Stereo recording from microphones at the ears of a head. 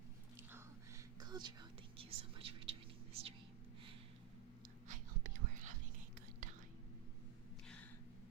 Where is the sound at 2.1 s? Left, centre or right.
Right.